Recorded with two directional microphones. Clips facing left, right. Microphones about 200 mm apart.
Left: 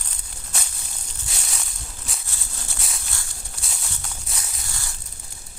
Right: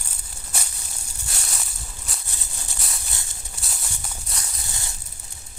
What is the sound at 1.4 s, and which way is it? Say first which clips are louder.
Maraca: even; centre (ahead or behind).